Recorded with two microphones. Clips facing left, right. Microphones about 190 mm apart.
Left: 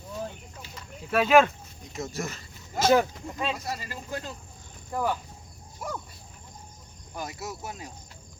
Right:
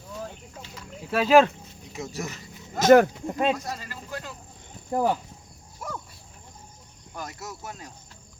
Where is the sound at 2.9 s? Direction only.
60° right (ahead or behind).